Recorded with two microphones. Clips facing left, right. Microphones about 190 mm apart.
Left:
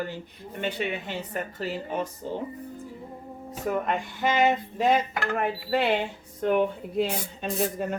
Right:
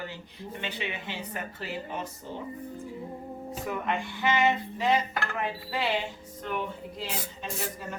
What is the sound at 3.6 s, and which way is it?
Dishes, 45° left (ahead or behind).